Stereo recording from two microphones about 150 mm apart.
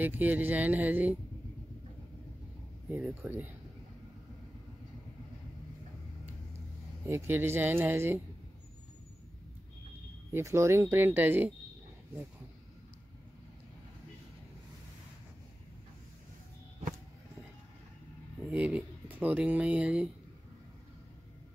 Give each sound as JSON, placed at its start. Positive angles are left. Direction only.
{"t": 0.0, "sound": "speech", "side_deg": -10}
{"t": 2.9, "sound": "speech", "side_deg": -10}
{"t": 7.1, "sound": "speech", "side_deg": -15}
{"t": 10.3, "sound": "speech", "side_deg": -20}
{"t": 18.5, "sound": "speech", "side_deg": -10}